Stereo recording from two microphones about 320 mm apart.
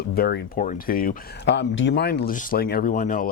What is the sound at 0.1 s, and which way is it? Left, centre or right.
Speech, left.